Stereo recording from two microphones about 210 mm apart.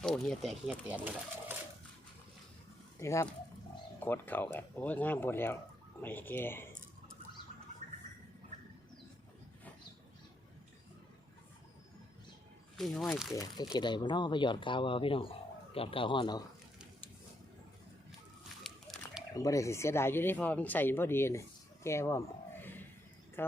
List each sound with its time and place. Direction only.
0.0 s speech: centre (ahead or behind)
3.0 s speech: 15° left (ahead or behind)
7.8 s a sound: 35° right (ahead or behind)
12.7 s speech: centre (ahead or behind)
13.3 s speech: 15° left (ahead or behind)
18.6 s a sound: centre (ahead or behind)
19.3 s speech: 15° left (ahead or behind)
23.4 s speech: 10° left (ahead or behind)